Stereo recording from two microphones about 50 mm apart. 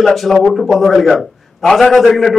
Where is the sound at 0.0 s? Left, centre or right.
Centre.